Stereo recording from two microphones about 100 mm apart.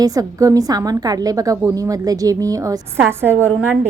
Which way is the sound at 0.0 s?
35° right (ahead or behind).